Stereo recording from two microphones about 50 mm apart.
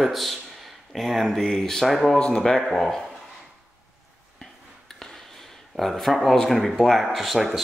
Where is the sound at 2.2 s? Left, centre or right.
Centre.